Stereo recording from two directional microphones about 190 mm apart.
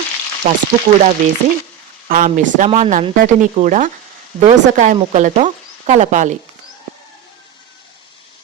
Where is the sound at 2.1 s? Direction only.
45° right (ahead or behind).